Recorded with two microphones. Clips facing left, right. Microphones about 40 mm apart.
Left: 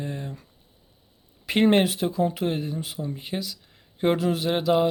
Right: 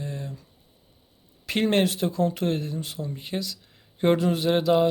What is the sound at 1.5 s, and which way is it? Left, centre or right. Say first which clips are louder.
Speech: left 3 dB; centre.